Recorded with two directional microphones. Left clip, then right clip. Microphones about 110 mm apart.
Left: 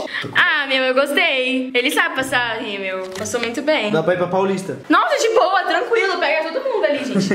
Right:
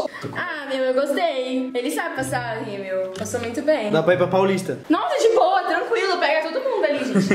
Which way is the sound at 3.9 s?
5° right (ahead or behind).